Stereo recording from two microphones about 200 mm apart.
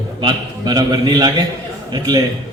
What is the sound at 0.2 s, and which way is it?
A man's voice, 20° right (ahead or behind).